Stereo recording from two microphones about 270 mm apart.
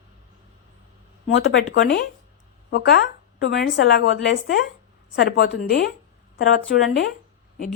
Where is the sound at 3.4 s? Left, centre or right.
Left.